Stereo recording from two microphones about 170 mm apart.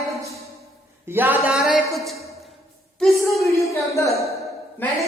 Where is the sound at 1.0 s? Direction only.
10° right (ahead or behind).